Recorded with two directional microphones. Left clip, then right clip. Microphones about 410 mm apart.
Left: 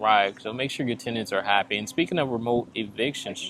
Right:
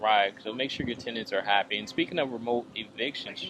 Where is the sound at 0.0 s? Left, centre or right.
Centre.